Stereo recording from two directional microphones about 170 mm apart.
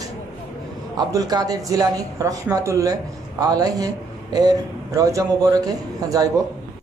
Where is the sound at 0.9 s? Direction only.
20° right (ahead or behind).